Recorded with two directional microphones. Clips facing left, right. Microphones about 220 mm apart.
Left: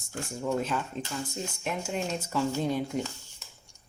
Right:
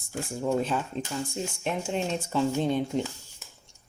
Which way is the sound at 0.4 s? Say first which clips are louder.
Right 3 dB; 30° right (ahead or behind).